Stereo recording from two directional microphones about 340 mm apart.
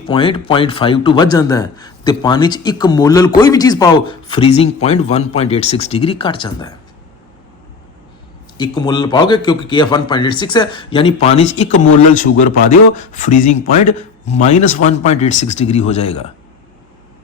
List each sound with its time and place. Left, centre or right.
0.1 s speech: centre
8.5 s speech: centre